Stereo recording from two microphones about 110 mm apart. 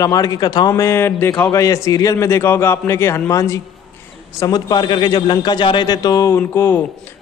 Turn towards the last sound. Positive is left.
turn(degrees=20)  # may be behind; listen again after turning